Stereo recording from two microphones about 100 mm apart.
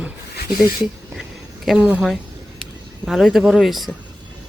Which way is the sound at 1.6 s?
10° right (ahead or behind).